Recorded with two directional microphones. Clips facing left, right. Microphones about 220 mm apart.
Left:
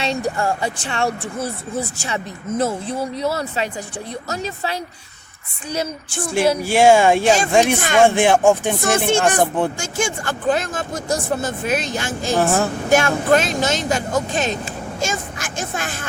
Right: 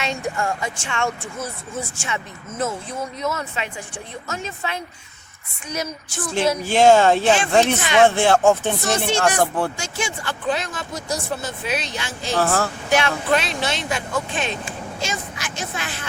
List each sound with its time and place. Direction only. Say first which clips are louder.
0.0 s speech: left 4 dB; 35° left (ahead or behind)
5.7 s a sound: left 4 dB; 30° left (ahead or behind)
6.6 s speech: even; 10° left (ahead or behind)
7.3 s speech: left 2 dB; 40° left (ahead or behind)
7.5 s speech: left 1 dB; 15° left (ahead or behind)
7.8 s speech: left 1 dB; 45° left (ahead or behind)
8.0 s speech: left 2 dB; 15° left (ahead or behind)
8.8 s speech: left 4 dB; 50° left (ahead or behind)
9.4 s a sound: left 3 dB; 20° left (ahead or behind)
9.7 s speech: left 5 dB; 45° left (ahead or behind)
12.4 s speech: left 2 dB; 20° left (ahead or behind)
12.8 s speech: left 4 dB; 50° left (ahead or behind)